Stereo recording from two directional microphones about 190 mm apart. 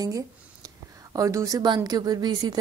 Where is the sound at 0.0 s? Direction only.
20° right (ahead or behind).